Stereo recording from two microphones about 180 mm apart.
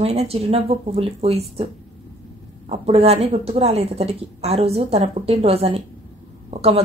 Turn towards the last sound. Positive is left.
turn(degrees=-35)  # may be behind; listen again after turning